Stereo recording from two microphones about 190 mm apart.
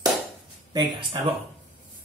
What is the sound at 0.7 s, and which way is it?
Speech, 25° right (ahead or behind).